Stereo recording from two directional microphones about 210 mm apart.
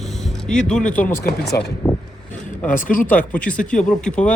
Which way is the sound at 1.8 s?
Centre (ahead or behind).